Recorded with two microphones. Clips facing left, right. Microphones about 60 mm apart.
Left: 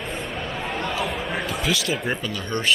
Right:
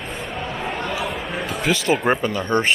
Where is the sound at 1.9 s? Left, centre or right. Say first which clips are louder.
Right 7 dB; right.